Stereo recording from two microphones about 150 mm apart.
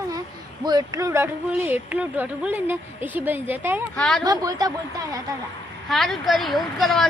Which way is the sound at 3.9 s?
5° left (ahead or behind).